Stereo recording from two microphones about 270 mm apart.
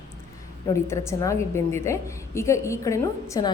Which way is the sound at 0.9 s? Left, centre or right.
Centre.